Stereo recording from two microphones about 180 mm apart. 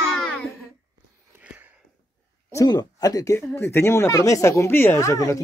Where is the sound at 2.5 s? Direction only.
20° left (ahead or behind).